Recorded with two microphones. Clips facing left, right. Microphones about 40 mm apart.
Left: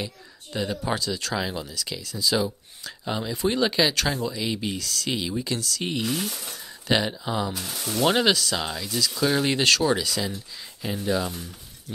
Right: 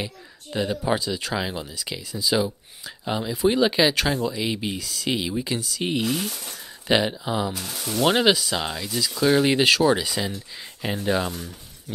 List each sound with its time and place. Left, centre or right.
0.0 s speech: centre
8.0 s speech: centre